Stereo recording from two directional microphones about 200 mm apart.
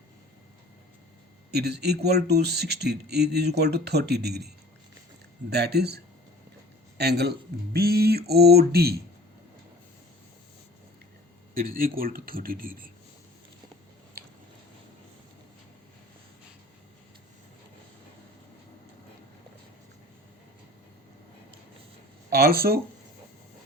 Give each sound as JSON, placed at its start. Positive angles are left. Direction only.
{"t": 1.5, "sound": "speech", "side_deg": -55}
{"t": 5.5, "sound": "speech", "side_deg": -55}
{"t": 11.5, "sound": "speech", "side_deg": -45}
{"t": 22.3, "sound": "speech", "side_deg": -50}